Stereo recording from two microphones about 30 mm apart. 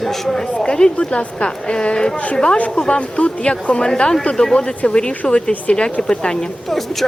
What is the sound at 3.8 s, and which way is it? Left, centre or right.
A woman's voice, left.